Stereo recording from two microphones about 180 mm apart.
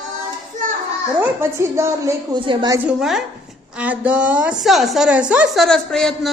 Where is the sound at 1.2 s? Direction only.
15° right (ahead or behind).